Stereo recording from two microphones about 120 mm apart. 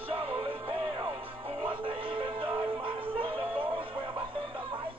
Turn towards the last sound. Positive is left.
turn(degrees=-45)  # may be behind; listen again after turning